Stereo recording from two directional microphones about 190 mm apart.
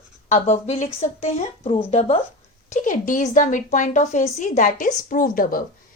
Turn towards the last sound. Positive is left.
turn(degrees=45)  # may be behind; listen again after turning